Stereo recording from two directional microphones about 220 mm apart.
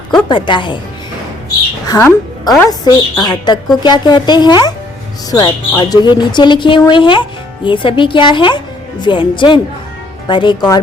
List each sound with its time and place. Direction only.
0.1 s speech: 20° left (ahead or behind)
1.9 s a woman's voice: 15° left (ahead or behind)